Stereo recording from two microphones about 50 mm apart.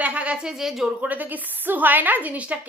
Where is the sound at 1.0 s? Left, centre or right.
Right.